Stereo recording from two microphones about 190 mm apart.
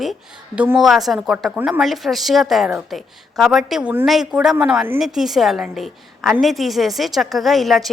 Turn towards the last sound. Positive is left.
turn(degrees=0)  # may be behind; listen again after turning